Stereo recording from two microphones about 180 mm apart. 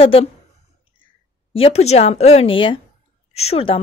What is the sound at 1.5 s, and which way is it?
A woman's voice, 35° left (ahead or behind).